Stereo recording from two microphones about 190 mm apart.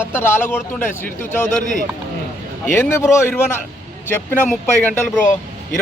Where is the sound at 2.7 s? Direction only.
15° left (ahead or behind).